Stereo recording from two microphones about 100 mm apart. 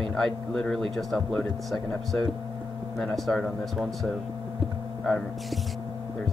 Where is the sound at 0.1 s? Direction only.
5° left (ahead or behind).